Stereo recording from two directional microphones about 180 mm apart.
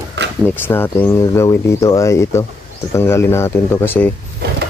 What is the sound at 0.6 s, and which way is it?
Speech, 10° left (ahead or behind).